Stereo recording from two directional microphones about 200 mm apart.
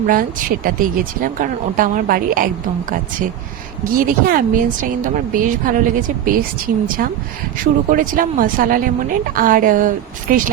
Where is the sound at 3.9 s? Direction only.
45° right (ahead or behind).